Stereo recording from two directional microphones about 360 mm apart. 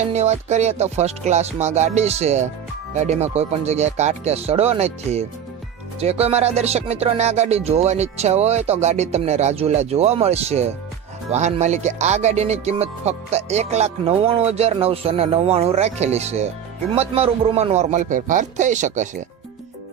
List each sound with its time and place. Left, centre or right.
0.1 s speech: centre